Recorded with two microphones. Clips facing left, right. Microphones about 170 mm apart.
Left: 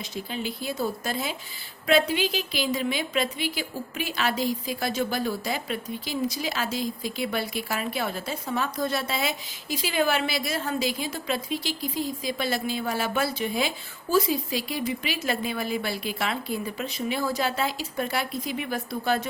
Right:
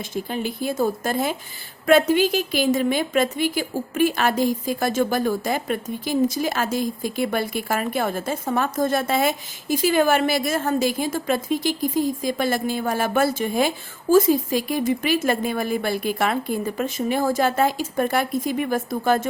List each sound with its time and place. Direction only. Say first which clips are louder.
0.1 s a woman's voice: right 6 dB; 50° right (ahead or behind)